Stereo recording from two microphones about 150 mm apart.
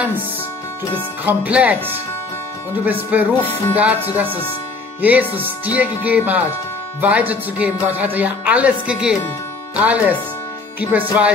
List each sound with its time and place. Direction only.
1.2 s speech: 10° right (ahead or behind)